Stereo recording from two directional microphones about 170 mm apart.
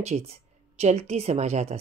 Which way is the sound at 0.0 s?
40° right (ahead or behind).